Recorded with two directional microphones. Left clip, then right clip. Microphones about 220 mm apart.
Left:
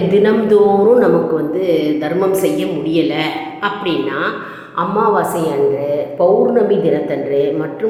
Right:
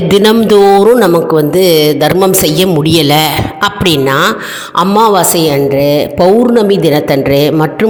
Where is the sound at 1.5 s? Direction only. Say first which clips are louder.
Right 10 dB; 50° right (ahead or behind).